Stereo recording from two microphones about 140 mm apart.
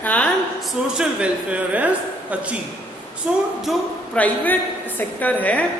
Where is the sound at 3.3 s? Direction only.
5° right (ahead or behind).